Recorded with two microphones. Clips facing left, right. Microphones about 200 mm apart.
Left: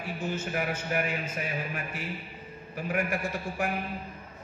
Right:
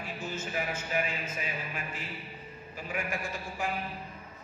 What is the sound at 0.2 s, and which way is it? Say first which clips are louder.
Speech: left 4 dB; 60° left (ahead or behind).